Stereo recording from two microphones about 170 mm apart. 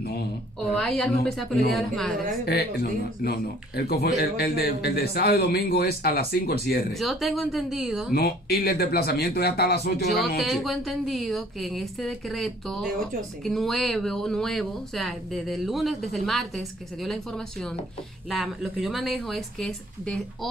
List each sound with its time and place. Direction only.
0.0 s a woman's voice: 65° left (ahead or behind)
0.7 s speech: 5° left (ahead or behind)
2.4 s a man's voice: 70° left (ahead or behind)
6.9 s speech: centre (ahead or behind)
8.1 s a man's voice: 65° left (ahead or behind)
10.1 s speech: centre (ahead or behind)